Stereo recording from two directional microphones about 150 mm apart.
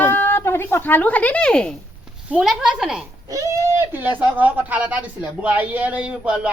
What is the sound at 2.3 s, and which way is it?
Speech, 5° right (ahead or behind).